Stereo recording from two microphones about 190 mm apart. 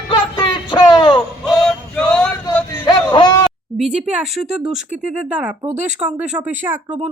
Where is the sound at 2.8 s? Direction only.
25° left (ahead or behind).